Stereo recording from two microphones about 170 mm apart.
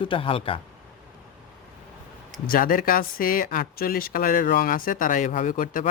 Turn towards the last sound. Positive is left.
turn(degrees=55)  # may be behind; listen again after turning